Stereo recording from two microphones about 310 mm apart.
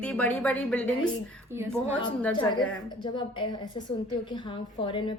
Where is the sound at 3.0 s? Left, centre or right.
Centre.